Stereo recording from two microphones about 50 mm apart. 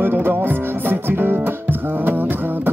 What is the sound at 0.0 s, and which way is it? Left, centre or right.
Music, right.